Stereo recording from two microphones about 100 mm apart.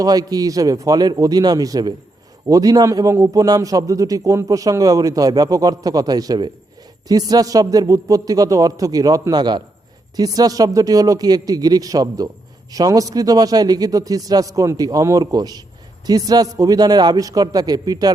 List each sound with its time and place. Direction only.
0.0 s a man's voice: 40° right (ahead or behind)